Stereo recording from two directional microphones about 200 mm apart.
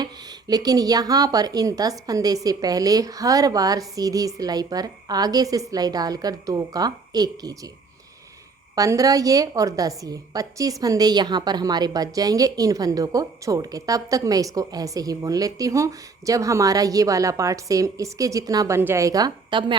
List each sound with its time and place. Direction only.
0.0 s speech: 20° right (ahead or behind)
8.7 s a woman's voice: 15° right (ahead or behind)